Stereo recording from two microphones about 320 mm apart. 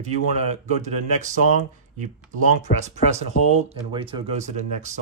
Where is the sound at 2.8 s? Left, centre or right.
Right.